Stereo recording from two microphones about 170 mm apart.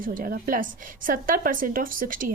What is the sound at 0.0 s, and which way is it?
A woman's voice, 55° right (ahead or behind).